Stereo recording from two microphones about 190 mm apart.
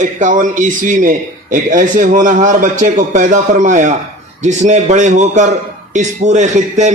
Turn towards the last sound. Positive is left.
turn(degrees=-40)  # may be behind; listen again after turning